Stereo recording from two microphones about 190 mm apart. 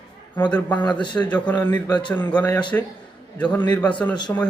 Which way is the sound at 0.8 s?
25° left (ahead or behind).